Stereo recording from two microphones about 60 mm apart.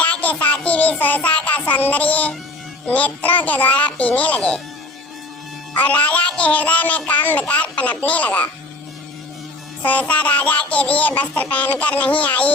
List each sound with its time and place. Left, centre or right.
0.0 s music: left
5.7 s music: left
9.8 s music: left